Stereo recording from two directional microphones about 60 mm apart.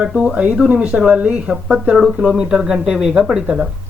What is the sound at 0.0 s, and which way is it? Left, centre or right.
Speech, centre.